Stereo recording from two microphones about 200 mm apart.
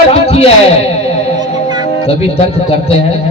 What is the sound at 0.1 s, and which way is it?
Speech, 30° left (ahead or behind).